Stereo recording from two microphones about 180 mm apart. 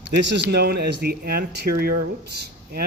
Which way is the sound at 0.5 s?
60° right (ahead or behind).